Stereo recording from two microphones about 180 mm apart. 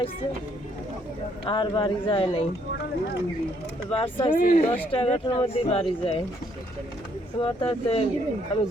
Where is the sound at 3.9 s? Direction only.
30° left (ahead or behind).